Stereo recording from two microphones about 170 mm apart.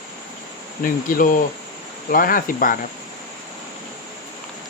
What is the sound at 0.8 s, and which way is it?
Cricket, 55° left (ahead or behind).